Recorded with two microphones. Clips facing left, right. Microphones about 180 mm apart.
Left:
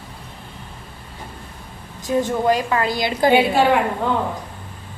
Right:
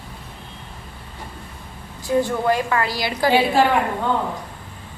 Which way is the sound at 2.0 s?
15° left (ahead or behind).